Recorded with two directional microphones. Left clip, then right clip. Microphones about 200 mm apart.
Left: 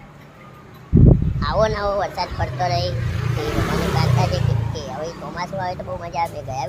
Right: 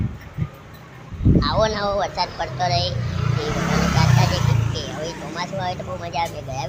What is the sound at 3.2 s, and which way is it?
Vehicle, 55° left (ahead or behind).